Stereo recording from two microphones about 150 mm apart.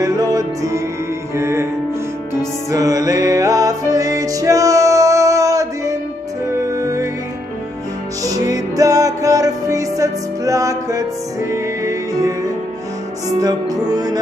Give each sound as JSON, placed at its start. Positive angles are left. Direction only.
{"t": 0.0, "sound": "music", "side_deg": -25}
{"t": 2.7, "sound": "music", "side_deg": -20}
{"t": 8.2, "sound": "music", "side_deg": -25}